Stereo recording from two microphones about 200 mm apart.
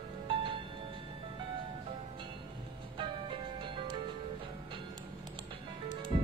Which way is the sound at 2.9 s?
25° right (ahead or behind).